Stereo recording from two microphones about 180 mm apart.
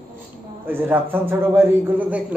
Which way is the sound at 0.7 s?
10° right (ahead or behind).